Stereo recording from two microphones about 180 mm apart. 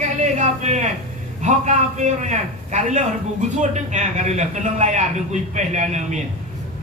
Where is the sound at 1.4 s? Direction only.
40° right (ahead or behind).